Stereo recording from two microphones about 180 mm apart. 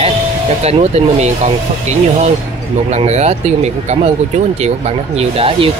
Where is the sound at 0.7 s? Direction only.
35° right (ahead or behind).